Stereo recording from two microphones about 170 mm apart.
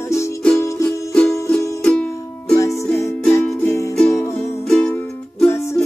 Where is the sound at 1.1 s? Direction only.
5° left (ahead or behind).